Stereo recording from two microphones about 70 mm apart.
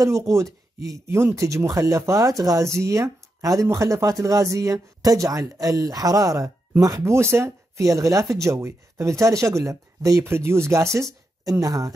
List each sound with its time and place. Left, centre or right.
1.0 s speech: right
7.1 s speech: right
10.2 s speech: right